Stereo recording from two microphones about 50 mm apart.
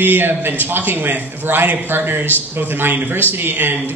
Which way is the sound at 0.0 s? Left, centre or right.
Right.